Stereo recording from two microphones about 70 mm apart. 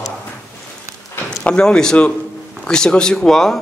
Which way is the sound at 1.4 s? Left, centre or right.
Centre.